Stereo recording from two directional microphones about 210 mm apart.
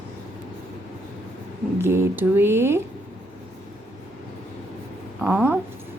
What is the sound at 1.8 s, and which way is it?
Speech, 10° right (ahead or behind).